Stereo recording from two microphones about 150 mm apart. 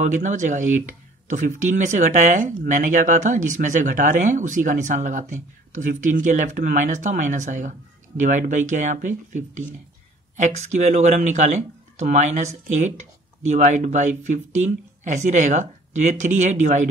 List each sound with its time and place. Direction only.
0.0 s speech: 55° right (ahead or behind)